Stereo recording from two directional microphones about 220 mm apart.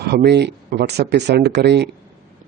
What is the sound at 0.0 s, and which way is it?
Speech, 45° right (ahead or behind).